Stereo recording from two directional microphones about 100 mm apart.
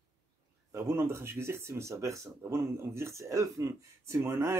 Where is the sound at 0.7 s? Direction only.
30° right (ahead or behind).